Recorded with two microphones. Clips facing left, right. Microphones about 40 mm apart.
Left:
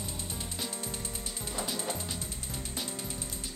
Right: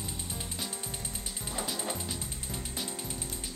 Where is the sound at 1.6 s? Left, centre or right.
Centre.